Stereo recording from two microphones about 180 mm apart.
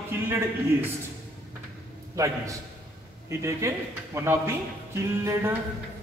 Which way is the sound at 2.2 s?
20° right (ahead or behind).